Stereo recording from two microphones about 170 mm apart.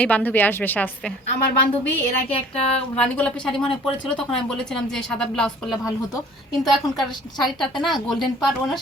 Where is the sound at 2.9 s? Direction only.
5° left (ahead or behind).